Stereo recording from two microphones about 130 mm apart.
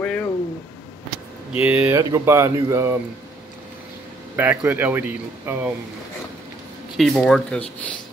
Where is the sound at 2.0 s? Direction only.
25° right (ahead or behind).